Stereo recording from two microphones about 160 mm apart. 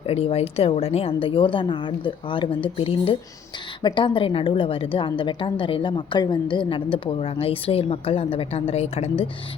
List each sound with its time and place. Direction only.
0.1 s a woman's voice: 40° left (ahead or behind)